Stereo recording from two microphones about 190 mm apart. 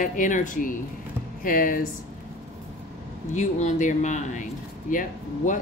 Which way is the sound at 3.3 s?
35° left (ahead or behind).